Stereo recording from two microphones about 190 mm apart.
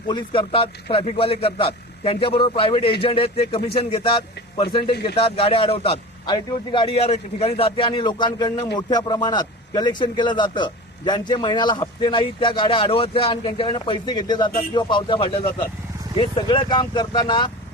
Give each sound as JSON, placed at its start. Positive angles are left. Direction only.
{"t": 0.1, "sound": "a man's voice", "side_deg": 25}